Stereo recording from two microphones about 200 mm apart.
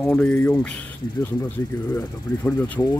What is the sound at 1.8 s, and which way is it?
Speech, 20° left (ahead or behind).